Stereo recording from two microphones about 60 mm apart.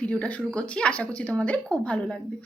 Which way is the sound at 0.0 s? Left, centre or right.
Left.